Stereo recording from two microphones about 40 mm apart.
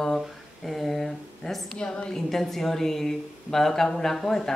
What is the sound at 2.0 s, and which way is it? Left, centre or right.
Speech, centre.